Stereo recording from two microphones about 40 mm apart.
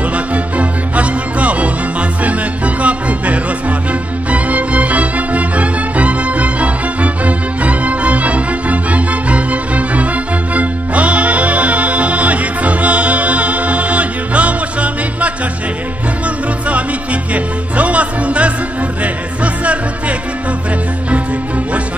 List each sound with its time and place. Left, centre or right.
0.1 s music: right
16.6 s music: right